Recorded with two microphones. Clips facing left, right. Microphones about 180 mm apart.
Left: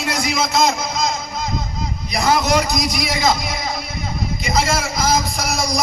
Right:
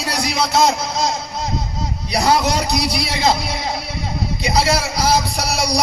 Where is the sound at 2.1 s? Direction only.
35° right (ahead or behind).